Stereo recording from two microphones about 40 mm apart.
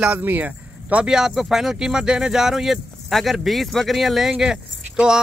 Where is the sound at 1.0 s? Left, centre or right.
Centre.